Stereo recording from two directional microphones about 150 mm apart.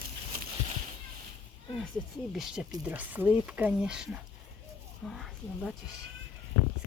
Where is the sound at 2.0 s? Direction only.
5° left (ahead or behind).